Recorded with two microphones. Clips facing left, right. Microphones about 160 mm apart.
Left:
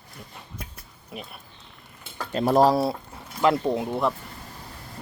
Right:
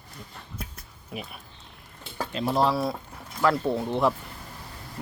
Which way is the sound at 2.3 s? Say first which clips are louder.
Left 6 dB; 45° left (ahead or behind).